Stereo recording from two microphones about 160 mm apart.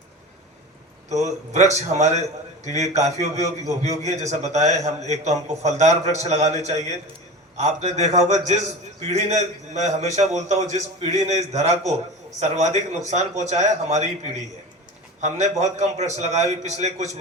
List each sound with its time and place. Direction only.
1.1 s a man's voice: 45° right (ahead or behind)